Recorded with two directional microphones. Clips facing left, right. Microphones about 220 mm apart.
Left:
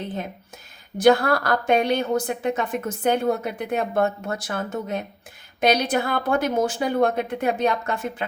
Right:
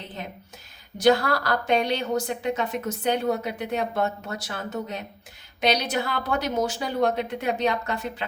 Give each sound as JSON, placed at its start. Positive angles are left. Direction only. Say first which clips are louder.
{"t": 0.9, "sound": "a woman's voice", "louder": "left 3 dB", "side_deg": 50}